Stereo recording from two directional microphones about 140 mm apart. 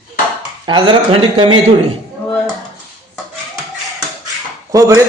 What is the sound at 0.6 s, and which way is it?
Speech, 35° right (ahead or behind).